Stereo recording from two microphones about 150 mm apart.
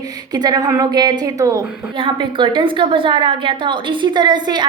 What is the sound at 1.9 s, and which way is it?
A woman's voice, 35° right (ahead or behind).